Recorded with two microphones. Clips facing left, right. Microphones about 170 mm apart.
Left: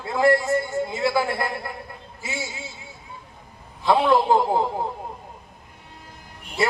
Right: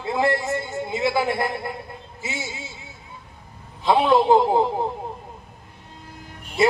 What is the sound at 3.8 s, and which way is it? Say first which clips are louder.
Speech: right 1 dB; 20° right (ahead or behind).